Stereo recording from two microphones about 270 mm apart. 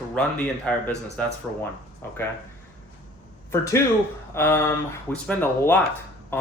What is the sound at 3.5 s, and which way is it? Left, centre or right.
Speech, centre.